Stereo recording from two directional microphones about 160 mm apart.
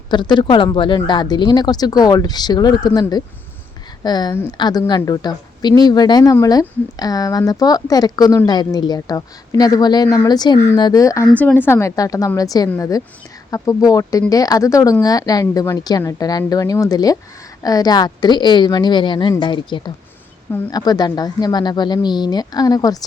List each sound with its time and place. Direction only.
0.1 s speech: 30° left (ahead or behind)
11.3 s speech: 10° left (ahead or behind); by 23.0 s 25° left (ahead or behind)